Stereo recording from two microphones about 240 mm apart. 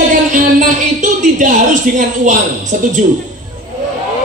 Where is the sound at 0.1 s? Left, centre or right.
Right.